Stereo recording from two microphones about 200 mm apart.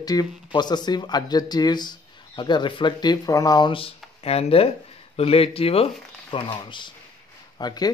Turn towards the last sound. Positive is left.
turn(degrees=20)  # may be behind; listen again after turning